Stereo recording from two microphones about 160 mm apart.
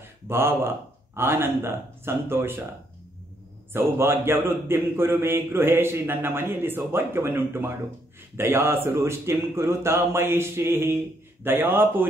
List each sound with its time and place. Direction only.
0.3 s speech: 15° right (ahead or behind)
3.7 s speech: 15° right (ahead or behind)